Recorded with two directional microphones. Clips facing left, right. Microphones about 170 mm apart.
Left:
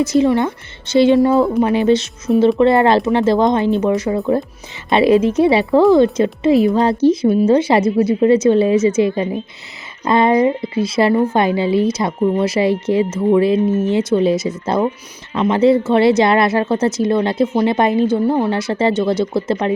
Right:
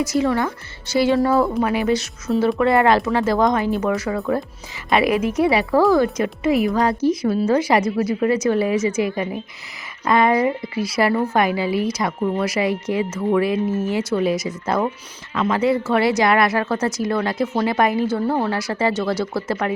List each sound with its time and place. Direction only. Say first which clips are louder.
0.0 s a woman's voice: left 5 dB; 20° left (ahead or behind)